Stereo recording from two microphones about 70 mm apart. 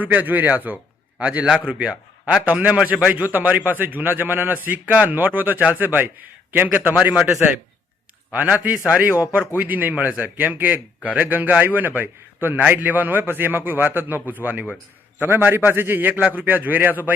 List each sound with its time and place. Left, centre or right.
0.0 s a man's voice: right
8.3 s a man's voice: right